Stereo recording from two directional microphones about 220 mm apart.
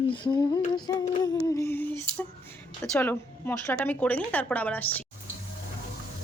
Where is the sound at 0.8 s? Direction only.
20° left (ahead or behind).